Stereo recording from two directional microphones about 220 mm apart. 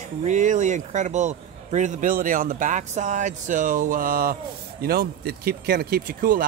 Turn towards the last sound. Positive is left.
turn(degrees=-40)  # may be behind; listen again after turning